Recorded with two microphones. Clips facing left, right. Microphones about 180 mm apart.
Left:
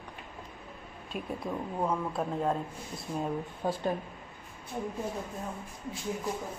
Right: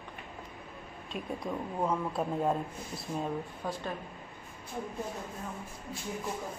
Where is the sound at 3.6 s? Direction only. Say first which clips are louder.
Left 6 dB; 25° left (ahead or behind).